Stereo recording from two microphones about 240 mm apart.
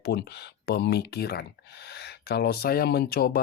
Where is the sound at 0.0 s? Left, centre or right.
Left.